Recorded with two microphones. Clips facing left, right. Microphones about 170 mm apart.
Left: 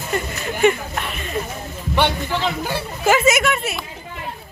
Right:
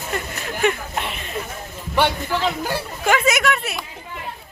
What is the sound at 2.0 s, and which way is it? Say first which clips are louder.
Speech: even; 10° right (ahead or behind).